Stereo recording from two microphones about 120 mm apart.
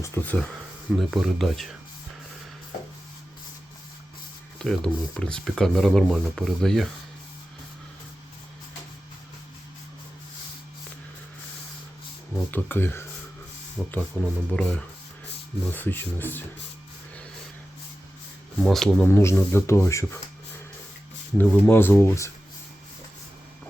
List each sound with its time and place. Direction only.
0.0 s speech: 20° left (ahead or behind)
0.9 s speech: centre (ahead or behind)
4.6 s speech: 5° left (ahead or behind)
12.3 s speech: 15° left (ahead or behind)
14.2 s speech: 20° left (ahead or behind)
14.5 s speech: 10° left (ahead or behind)
18.6 s speech: 5° left (ahead or behind)
19.0 s speech: 20° left (ahead or behind)
21.3 s speech: 15° left (ahead or behind)